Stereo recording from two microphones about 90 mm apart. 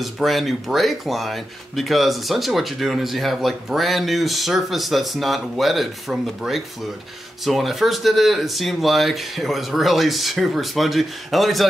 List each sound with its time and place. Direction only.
0.0 s speech: centre (ahead or behind)